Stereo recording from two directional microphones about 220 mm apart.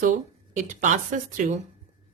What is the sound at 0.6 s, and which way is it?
Speech, 35° right (ahead or behind).